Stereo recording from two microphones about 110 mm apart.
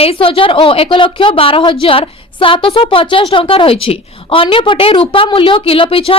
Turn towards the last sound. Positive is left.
turn(degrees=55)  # may be behind; listen again after turning